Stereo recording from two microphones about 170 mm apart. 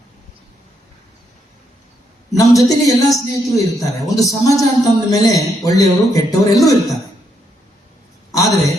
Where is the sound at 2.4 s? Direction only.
20° left (ahead or behind).